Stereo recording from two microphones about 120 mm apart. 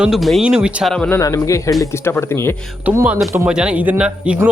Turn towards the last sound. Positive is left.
turn(degrees=-10)  # may be behind; listen again after turning